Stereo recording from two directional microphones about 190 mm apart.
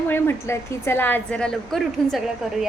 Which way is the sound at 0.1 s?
15° left (ahead or behind).